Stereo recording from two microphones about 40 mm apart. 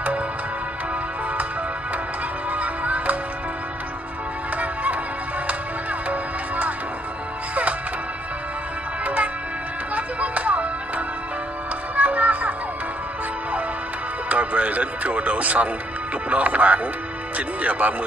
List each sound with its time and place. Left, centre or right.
2.5 s music: right
6.0 s music: right
9.0 s music: right
14.3 s music: right
16.3 s speech: right